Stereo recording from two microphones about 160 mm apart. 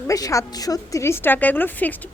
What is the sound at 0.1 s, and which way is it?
A woman's voice, 20° left (ahead or behind).